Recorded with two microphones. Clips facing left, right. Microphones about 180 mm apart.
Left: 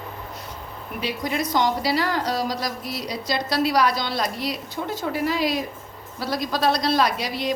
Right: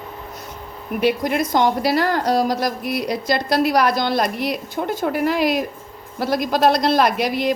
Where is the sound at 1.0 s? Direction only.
55° right (ahead or behind).